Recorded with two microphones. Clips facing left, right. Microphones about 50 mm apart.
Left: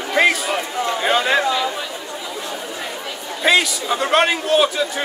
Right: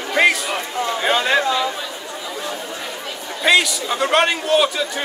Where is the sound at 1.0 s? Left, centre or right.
Centre.